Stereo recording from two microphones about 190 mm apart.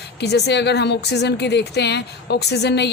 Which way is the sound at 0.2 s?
60° left (ahead or behind).